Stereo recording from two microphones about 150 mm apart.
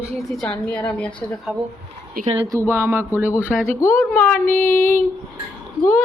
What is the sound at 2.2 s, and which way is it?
Speech, 80° right.